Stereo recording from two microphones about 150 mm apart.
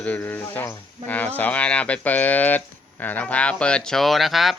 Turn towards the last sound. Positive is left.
turn(degrees=0)  # may be behind; listen again after turning